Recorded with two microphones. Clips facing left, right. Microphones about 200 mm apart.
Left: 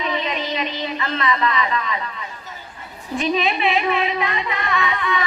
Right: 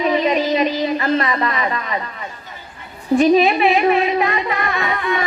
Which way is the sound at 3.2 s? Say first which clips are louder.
Right 8 dB; 45° right (ahead or behind).